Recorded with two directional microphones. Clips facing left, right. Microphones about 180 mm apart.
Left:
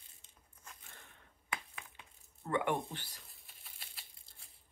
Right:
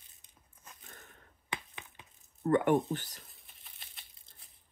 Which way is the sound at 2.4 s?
45° right (ahead or behind).